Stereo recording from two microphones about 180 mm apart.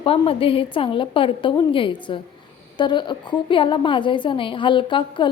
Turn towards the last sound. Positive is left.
turn(degrees=25)  # may be behind; listen again after turning